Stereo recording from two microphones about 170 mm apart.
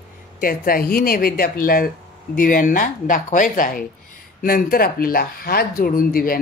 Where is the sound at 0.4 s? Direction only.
60° left (ahead or behind).